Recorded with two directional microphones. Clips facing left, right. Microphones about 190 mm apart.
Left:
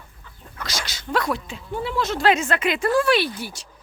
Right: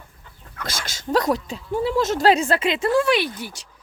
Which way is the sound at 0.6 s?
50° right (ahead or behind).